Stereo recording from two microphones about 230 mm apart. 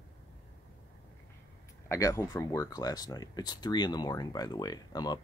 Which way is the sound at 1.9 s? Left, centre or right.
Centre.